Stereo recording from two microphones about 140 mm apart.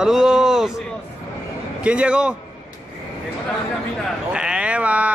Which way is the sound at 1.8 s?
10° right (ahead or behind).